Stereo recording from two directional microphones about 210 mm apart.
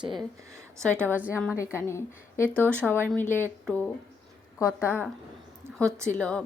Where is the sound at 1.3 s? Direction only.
10° left (ahead or behind).